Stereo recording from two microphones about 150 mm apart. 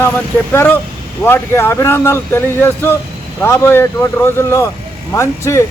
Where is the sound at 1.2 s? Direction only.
15° left (ahead or behind).